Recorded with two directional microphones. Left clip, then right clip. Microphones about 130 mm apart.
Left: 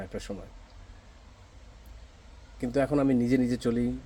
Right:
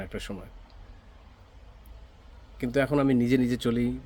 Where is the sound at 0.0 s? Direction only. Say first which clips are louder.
Right 1 dB; 30° right (ahead or behind).